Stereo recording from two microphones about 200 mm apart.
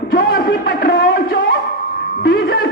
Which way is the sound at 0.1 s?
45° left (ahead or behind).